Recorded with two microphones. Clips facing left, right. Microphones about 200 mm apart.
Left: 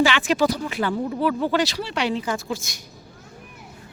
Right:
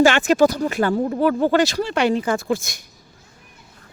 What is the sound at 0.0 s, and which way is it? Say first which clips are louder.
Speech: right 5 dB; 45° right (ahead or behind).